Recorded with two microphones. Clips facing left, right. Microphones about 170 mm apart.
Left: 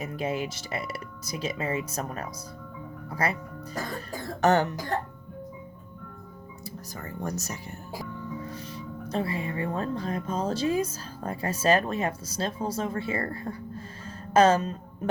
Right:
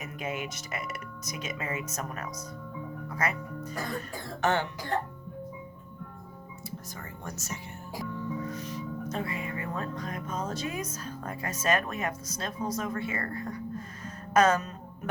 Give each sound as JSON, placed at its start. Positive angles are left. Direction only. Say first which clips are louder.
{"t": 0.0, "sound": "speech", "louder": "left 5 dB", "side_deg": 30}
{"t": 6.7, "sound": "speech", "louder": "left 3 dB", "side_deg": 40}